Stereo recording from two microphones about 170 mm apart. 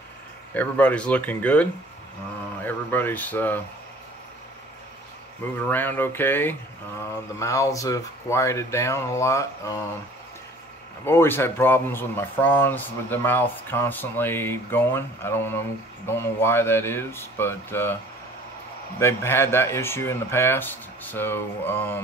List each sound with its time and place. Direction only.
0.6 s speech: 10° left (ahead or behind)
5.6 s speech: 10° left (ahead or behind)
11.1 s speech: 15° left (ahead or behind)
18.9 s speech: 15° left (ahead or behind)